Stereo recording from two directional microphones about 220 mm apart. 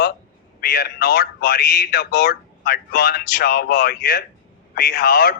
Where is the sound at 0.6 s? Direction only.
45° left (ahead or behind).